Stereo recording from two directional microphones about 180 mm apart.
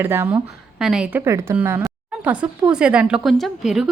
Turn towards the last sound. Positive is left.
turn(degrees=0)  # may be behind; listen again after turning